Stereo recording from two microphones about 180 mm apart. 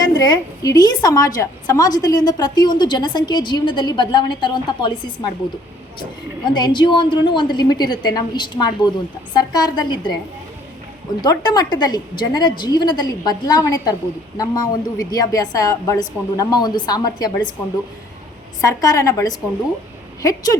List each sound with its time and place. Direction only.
0.0 s a woman's voice: 20° left (ahead or behind)
6.0 s a woman's voice: 25° left (ahead or behind)
11.2 s a woman's voice: 20° left (ahead or behind)
18.6 s a woman's voice: 20° left (ahead or behind)